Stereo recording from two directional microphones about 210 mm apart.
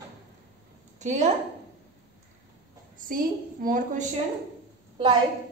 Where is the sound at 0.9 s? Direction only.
35° right (ahead or behind).